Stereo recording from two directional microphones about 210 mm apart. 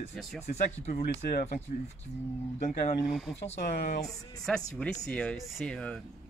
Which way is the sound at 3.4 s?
30° left (ahead or behind).